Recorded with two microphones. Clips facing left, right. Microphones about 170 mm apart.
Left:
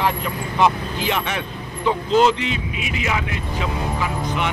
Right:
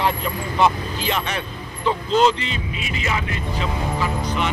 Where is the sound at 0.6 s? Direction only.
10° left (ahead or behind).